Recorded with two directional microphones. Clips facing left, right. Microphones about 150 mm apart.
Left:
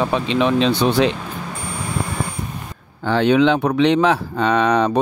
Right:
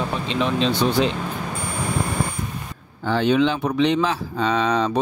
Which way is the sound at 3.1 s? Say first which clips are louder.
Left 4 dB; 65° left (ahead or behind).